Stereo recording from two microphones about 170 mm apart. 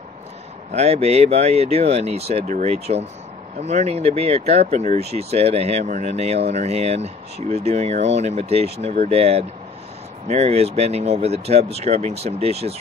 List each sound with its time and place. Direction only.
0.7 s speech: 40° right (ahead or behind)